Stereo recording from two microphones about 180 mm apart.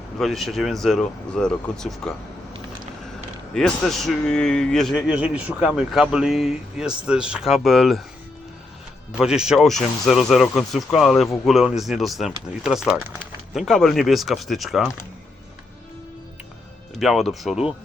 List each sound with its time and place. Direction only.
0.2 s speech: centre (ahead or behind)
3.5 s speech: centre (ahead or behind)
9.2 s speech: 5° right (ahead or behind)
17.0 s speech: centre (ahead or behind)